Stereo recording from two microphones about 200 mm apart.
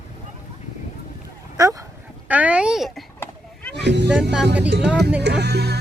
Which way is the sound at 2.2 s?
5° right (ahead or behind).